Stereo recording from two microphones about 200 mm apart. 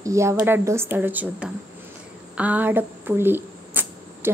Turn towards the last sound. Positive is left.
turn(degrees=-10)  # may be behind; listen again after turning